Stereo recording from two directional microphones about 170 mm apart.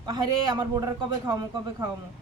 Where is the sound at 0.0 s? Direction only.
25° right (ahead or behind).